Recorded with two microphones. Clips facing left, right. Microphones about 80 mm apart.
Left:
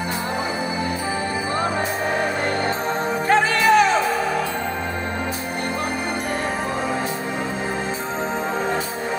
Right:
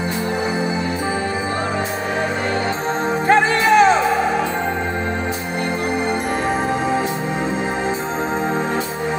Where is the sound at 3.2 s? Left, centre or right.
Right.